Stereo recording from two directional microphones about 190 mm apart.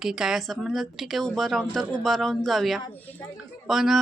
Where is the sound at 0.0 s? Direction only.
5° right (ahead or behind).